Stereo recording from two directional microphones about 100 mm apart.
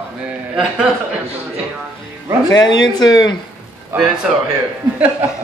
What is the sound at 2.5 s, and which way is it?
Speech, 45° left (ahead or behind).